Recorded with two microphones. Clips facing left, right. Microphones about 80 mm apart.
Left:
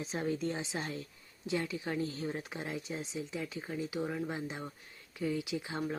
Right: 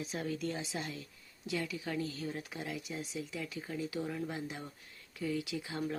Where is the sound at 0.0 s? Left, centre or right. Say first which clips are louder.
Left 3 dB; left.